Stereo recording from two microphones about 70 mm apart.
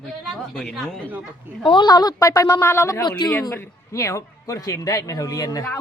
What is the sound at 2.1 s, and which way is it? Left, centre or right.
Speech, left.